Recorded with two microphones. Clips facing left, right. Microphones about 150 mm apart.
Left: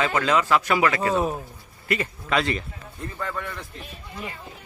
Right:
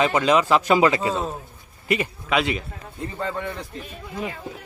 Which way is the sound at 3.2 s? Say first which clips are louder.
Right 3 dB; 25° right (ahead or behind).